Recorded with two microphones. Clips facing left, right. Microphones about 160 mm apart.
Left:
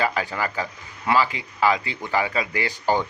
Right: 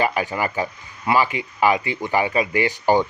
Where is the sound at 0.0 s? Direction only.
15° right (ahead or behind).